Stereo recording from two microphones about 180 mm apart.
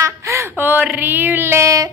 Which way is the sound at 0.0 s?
15° right (ahead or behind).